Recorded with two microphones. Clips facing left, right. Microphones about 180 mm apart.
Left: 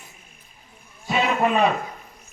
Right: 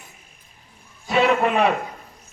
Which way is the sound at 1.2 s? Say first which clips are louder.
Right 2 dB; 65° right (ahead or behind).